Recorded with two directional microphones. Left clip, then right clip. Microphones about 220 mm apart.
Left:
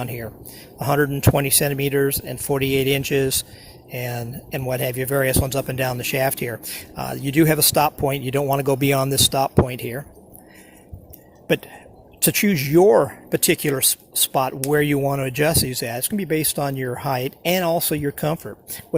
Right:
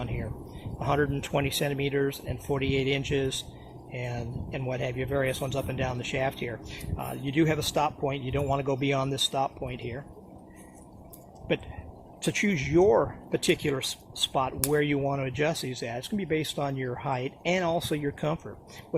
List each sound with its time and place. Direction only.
0.0 s speech: 35° left (ahead or behind)
12.2 s speech: 40° left (ahead or behind)